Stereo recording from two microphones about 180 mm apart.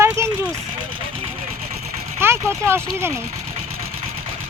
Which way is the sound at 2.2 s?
15° right (ahead or behind).